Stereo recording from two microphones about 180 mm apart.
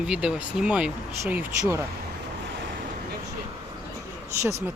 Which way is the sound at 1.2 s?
15° right (ahead or behind).